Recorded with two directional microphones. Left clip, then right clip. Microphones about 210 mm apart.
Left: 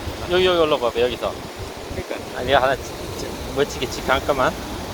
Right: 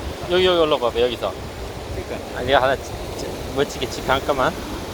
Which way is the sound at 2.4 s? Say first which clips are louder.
Even; 5° right (ahead or behind).